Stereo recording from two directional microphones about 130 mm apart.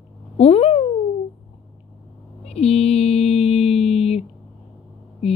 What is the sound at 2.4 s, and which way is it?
Mantra, 50° left (ahead or behind).